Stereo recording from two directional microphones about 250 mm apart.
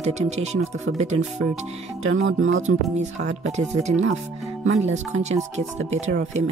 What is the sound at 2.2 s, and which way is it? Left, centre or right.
Speech, right.